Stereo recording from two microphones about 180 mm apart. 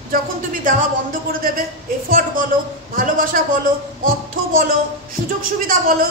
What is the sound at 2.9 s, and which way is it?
Speech, 50° right (ahead or behind).